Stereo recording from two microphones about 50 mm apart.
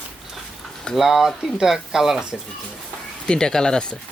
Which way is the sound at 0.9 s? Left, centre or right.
Centre.